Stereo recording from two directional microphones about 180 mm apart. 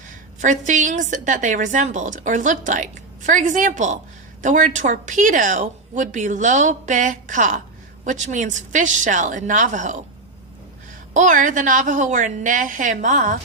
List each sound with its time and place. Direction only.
0.3 s a woman's voice: 45° right (ahead or behind)
11.1 s a woman's voice: 45° right (ahead or behind)